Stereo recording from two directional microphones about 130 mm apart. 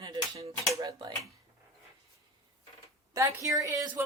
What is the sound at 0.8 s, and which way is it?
Speech, 30° right (ahead or behind).